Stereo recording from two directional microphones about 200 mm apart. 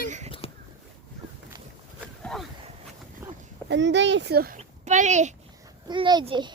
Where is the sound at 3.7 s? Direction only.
60° right (ahead or behind).